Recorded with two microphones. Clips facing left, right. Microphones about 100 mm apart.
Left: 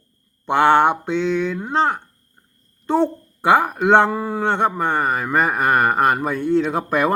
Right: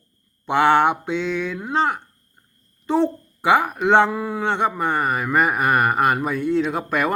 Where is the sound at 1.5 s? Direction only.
30° left (ahead or behind).